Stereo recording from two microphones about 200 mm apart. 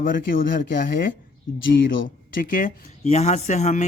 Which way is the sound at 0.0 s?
45° left (ahead or behind).